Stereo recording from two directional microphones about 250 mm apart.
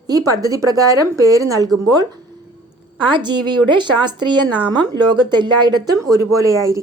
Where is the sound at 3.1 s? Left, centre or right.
Centre.